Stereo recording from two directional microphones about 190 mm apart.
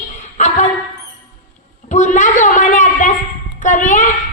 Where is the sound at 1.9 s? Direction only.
40° left (ahead or behind).